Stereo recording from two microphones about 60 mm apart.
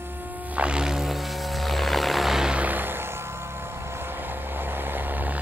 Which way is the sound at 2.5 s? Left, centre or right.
Right.